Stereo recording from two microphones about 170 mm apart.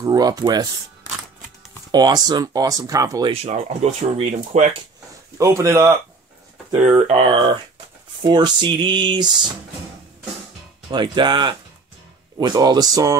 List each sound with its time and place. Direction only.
0.0 s speech: 20° right (ahead or behind)
1.9 s speech: 25° right (ahead or behind)
3.4 s speech: 40° right (ahead or behind)
5.4 s speech: 20° right (ahead or behind)
7.0 s speech: 35° right (ahead or behind)
10.9 s speech: 25° right (ahead or behind)